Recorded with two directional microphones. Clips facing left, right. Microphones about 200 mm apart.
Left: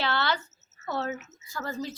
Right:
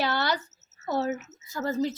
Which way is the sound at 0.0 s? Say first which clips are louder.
Right 1 dB; 15° right (ahead or behind).